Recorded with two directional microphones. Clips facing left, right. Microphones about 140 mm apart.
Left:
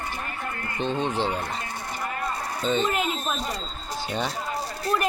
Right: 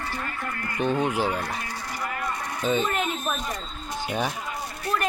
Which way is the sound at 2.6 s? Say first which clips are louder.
Even; 10° right (ahead or behind).